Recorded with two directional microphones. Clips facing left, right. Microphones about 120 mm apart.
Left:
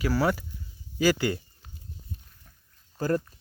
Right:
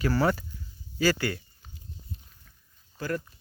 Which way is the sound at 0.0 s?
5° left (ahead or behind).